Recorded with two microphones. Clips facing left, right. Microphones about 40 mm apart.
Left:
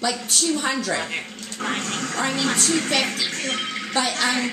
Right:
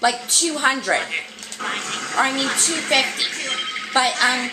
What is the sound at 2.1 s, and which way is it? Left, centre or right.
Speech, right.